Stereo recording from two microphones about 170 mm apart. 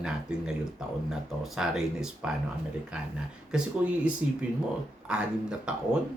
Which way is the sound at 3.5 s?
5° right (ahead or behind).